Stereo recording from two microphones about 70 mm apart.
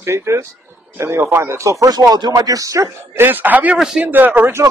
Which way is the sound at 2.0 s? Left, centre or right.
Right.